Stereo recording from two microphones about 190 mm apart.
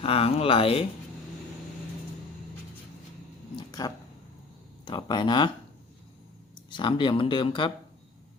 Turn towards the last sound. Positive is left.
turn(degrees=25)  # may be behind; listen again after turning